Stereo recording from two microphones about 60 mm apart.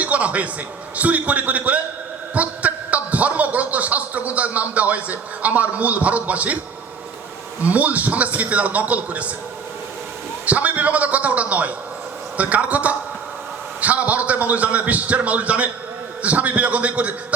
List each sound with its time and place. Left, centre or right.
0.0 s a sound: right
0.9 s a man's voice: right
7.6 s a man's voice: right
10.4 s a man's voice: right